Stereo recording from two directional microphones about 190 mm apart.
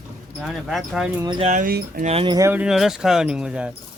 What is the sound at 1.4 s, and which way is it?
Speech, 45° right (ahead or behind).